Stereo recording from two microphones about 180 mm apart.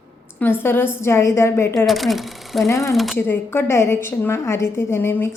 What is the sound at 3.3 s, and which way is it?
A woman's voice, 10° left (ahead or behind).